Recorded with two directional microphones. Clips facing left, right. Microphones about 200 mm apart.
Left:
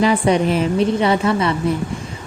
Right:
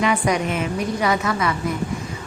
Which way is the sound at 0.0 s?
30° left (ahead or behind).